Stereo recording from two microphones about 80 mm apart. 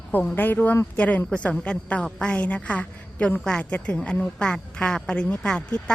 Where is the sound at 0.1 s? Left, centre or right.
Centre.